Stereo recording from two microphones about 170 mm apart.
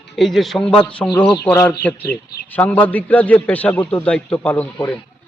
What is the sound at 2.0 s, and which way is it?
Speech, 65° left (ahead or behind).